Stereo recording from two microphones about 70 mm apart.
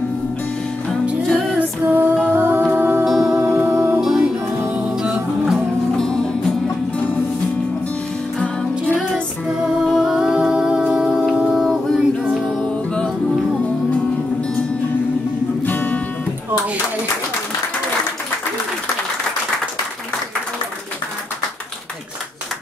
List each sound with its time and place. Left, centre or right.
1.6 s music: right
3.1 s music: centre
3.3 s music: right
3.7 s music: right
4.0 s music: centre
5.9 s music: centre
8.4 s music: centre
9.5 s music: centre
12.7 s music: centre
15.6 s music: left